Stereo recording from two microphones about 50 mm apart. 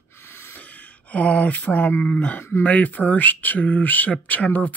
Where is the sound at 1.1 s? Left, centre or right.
Left.